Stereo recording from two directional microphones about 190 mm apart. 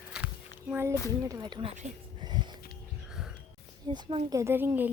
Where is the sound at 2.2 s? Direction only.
20° right (ahead or behind).